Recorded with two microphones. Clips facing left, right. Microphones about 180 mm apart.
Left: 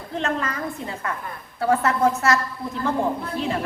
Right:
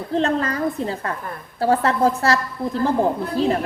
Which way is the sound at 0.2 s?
35° right (ahead or behind).